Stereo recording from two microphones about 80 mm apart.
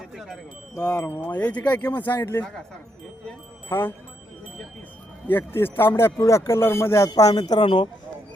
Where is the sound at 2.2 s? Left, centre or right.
Left.